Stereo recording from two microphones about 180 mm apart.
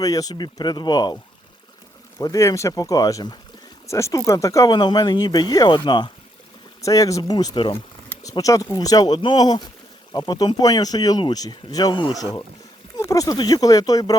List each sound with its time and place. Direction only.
0.0 s speech: 20° left (ahead or behind)